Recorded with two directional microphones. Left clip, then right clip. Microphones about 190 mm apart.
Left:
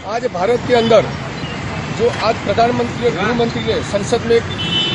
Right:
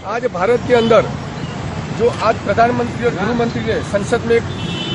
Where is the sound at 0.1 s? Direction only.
Centre (ahead or behind).